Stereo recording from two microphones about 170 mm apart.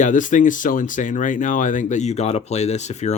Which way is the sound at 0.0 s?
50° left (ahead or behind).